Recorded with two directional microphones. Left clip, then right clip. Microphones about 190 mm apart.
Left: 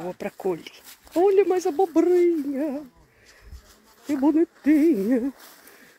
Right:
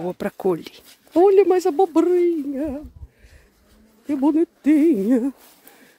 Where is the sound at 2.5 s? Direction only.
10° right (ahead or behind).